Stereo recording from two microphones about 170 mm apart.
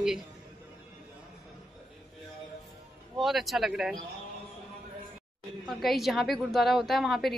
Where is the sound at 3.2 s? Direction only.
Centre (ahead or behind).